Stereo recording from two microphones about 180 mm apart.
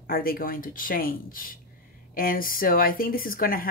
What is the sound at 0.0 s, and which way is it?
Speech, 55° left (ahead or behind).